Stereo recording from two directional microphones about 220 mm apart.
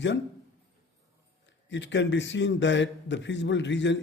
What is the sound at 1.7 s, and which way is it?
A man's voice, 55° left (ahead or behind).